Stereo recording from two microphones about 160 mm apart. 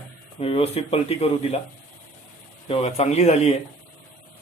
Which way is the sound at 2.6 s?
40° left (ahead or behind).